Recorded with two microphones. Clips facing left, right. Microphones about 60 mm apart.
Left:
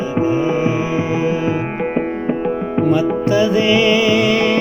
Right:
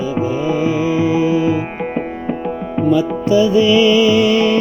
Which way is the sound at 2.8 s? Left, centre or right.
Left.